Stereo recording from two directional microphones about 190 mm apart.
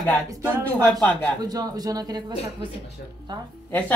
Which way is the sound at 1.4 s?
20° right (ahead or behind).